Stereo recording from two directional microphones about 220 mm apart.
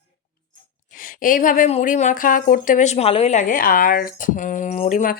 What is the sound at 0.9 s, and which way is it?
A woman's voice, 40° left (ahead or behind).